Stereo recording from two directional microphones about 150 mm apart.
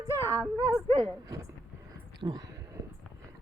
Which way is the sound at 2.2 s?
25° right (ahead or behind).